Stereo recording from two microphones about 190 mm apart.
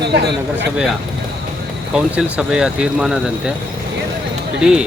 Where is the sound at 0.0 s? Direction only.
60° right (ahead or behind).